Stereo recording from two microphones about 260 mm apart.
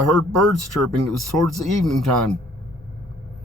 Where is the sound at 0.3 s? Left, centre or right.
Right.